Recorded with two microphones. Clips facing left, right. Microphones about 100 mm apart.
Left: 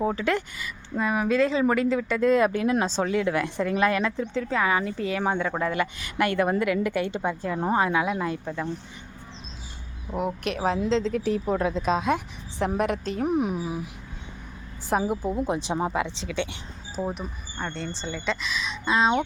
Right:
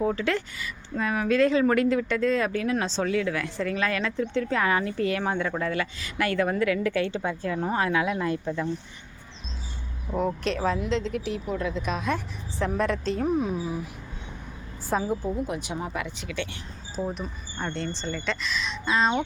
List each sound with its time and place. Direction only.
0.0 s a woman's voice: 15° left (ahead or behind)
4.4 s a woman's voice: 5° left (ahead or behind)
10.5 s a woman's voice: 20° left (ahead or behind)
15.4 s a woman's voice: 30° left (ahead or behind)
17.6 s speech: centre (ahead or behind)